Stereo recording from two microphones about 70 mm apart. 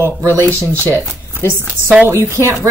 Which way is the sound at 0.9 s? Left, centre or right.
Right.